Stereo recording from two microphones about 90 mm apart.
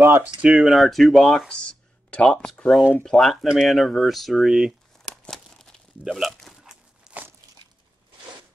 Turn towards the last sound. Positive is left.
turn(degrees=-10)  # may be behind; listen again after turning